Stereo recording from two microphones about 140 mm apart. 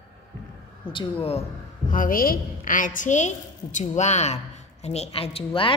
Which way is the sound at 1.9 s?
80° left.